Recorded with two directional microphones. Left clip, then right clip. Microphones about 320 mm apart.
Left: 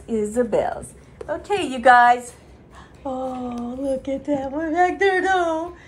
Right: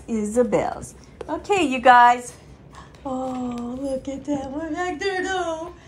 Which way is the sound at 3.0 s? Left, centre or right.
Centre.